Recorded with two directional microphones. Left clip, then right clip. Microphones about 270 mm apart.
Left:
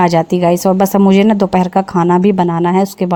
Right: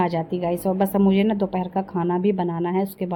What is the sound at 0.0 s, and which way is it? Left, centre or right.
A woman's voice, left.